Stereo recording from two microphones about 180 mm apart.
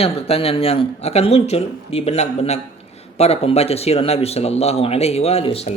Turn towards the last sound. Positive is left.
turn(degrees=35)  # may be behind; listen again after turning